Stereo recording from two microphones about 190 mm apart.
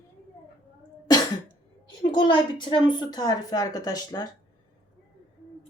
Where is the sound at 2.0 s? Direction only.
25° left (ahead or behind).